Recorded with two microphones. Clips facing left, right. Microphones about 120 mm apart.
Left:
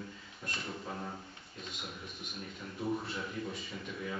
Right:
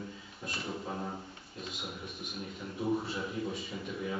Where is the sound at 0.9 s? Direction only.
15° right (ahead or behind).